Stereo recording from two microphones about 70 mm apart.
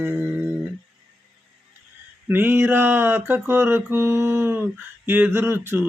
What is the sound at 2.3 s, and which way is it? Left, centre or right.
Mantra, right.